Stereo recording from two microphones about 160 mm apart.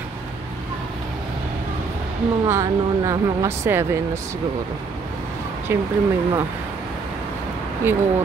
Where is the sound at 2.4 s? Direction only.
20° right (ahead or behind).